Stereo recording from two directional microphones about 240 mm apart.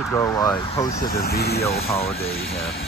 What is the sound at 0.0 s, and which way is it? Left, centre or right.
Speech, centre.